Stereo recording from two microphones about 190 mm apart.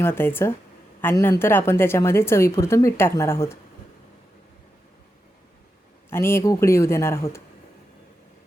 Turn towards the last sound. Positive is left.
turn(degrees=15)  # may be behind; listen again after turning